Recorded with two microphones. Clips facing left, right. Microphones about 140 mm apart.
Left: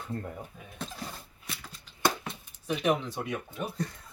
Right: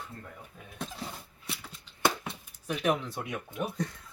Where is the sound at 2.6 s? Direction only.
Centre (ahead or behind).